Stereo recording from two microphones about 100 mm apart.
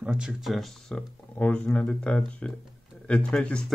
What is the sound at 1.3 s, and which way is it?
Speech, 10° left (ahead or behind).